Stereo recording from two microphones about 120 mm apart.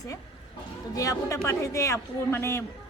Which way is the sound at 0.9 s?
25° left (ahead or behind).